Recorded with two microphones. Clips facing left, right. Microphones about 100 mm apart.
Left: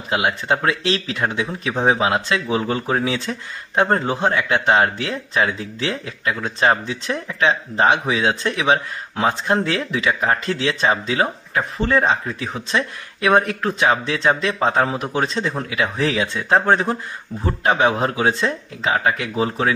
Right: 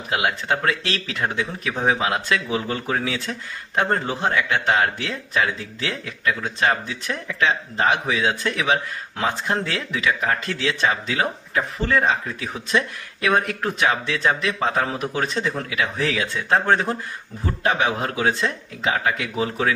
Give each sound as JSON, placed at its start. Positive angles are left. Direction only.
{"t": 0.1, "sound": "a man's voice", "side_deg": 25}